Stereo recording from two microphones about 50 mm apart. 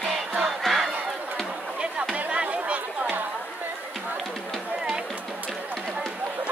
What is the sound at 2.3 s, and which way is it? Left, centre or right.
Chatter, right.